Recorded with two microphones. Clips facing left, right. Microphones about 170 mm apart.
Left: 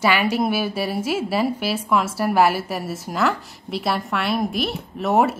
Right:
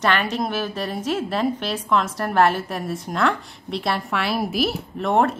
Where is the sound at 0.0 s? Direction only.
10° left (ahead or behind).